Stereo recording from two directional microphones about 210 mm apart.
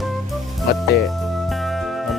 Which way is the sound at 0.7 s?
50° left (ahead or behind).